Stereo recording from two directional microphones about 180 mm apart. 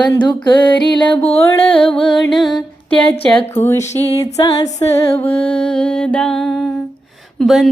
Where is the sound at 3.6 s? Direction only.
15° left (ahead or behind).